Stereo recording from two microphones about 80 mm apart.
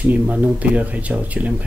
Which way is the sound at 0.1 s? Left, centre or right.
Centre.